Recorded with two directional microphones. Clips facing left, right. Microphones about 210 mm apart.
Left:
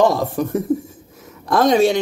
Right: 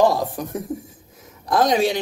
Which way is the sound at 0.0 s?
25° left (ahead or behind).